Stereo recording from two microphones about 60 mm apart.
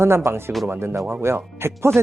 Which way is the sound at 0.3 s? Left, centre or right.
Right.